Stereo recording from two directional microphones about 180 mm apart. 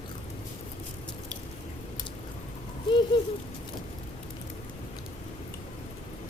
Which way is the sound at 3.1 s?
25° left (ahead or behind).